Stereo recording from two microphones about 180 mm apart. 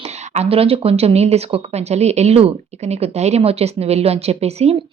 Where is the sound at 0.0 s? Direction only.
35° right (ahead or behind).